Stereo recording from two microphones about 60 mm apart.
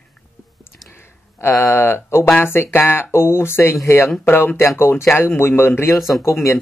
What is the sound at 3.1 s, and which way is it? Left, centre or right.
Speech, left.